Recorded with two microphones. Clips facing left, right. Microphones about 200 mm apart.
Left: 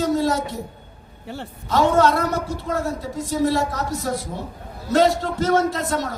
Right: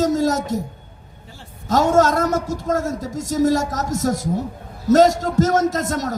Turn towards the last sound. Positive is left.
turn(degrees=-45)  # may be behind; listen again after turning